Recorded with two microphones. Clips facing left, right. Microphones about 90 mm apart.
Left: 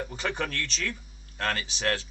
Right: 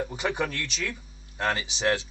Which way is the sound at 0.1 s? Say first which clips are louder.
Right 3 dB; 15° right (ahead or behind).